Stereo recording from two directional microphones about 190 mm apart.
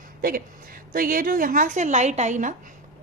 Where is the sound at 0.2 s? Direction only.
50° right (ahead or behind).